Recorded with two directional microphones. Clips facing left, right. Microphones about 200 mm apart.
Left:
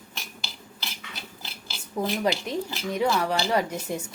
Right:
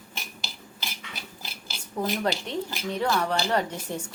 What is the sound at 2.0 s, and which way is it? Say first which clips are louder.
A woman's voice: left 1 dB; 10° left (ahead or behind).